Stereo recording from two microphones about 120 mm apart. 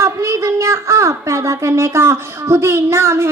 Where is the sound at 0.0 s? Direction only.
25° right (ahead or behind).